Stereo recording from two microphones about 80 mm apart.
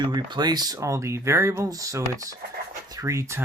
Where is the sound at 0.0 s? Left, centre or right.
Right.